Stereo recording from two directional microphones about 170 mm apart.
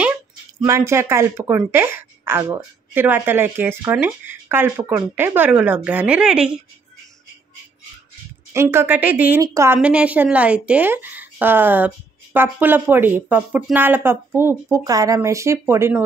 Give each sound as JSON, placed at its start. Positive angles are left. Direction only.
{"t": 0.6, "sound": "a woman's voice", "side_deg": -15}
{"t": 8.5, "sound": "a woman's voice", "side_deg": -15}
{"t": 9.8, "sound": "a woman's voice", "side_deg": -5}